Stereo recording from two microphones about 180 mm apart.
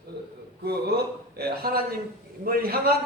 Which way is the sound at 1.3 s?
60° right (ahead or behind).